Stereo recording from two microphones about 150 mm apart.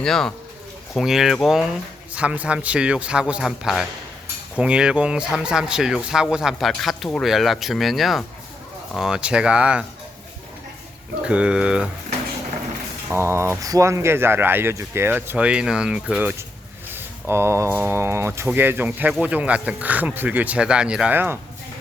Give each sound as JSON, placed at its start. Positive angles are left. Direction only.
{"t": 0.0, "sound": "speech", "side_deg": 5}
{"t": 11.3, "sound": "speech", "side_deg": -5}
{"t": 13.1, "sound": "speech", "side_deg": -15}